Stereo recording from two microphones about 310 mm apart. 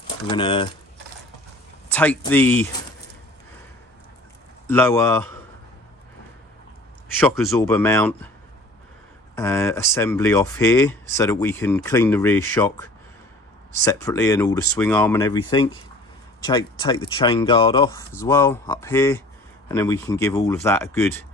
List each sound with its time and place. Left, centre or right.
0.3 s speech: centre
1.9 s speech: centre
4.6 s speech: centre
7.5 s speech: centre
9.3 s speech: centre
13.8 s speech: centre